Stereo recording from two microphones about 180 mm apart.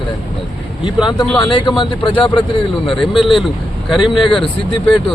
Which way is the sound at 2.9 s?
Centre (ahead or behind).